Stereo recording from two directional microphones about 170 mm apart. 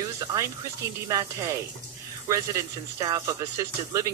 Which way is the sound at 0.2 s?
20° right (ahead or behind).